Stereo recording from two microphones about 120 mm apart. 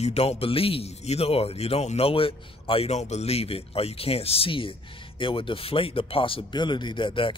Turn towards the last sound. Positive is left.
turn(degrees=45)  # may be behind; listen again after turning